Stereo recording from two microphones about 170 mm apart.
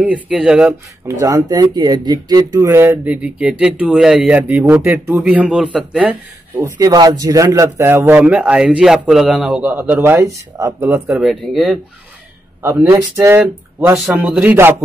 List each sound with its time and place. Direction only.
0.0 s speech: 5° right (ahead or behind)
1.2 s speech: 20° right (ahead or behind)
11.2 s speech: centre (ahead or behind)
12.6 s speech: 15° right (ahead or behind)
13.9 s speech: centre (ahead or behind)